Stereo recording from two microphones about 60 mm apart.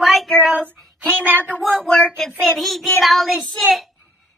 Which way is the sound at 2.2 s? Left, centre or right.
Centre.